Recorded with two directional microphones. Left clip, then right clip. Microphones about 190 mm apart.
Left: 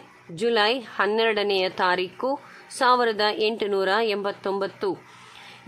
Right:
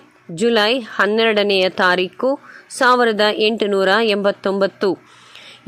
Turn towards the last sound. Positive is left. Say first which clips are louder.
# right 9 dB
turn(degrees=-30)  # may be behind; listen again after turning